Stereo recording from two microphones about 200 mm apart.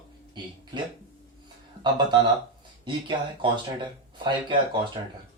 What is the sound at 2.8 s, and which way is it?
Speech, 25° right (ahead or behind).